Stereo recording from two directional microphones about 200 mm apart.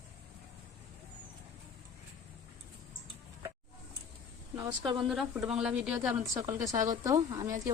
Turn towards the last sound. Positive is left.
turn(degrees=-15)  # may be behind; listen again after turning